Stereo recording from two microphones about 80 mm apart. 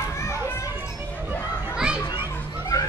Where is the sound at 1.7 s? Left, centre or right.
Centre.